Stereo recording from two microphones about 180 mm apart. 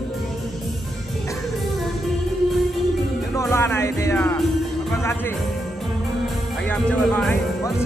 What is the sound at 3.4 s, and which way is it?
Music, 15° left (ahead or behind).